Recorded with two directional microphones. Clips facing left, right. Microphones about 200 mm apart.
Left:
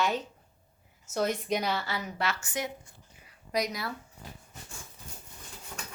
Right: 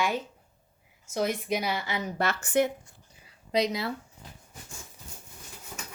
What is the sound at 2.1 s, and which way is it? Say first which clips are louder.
Speech: right 10 dB; 50° right (ahead or behind).